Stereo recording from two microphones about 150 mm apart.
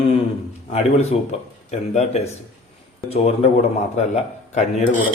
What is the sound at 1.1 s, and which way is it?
A man's voice, 45° left (ahead or behind).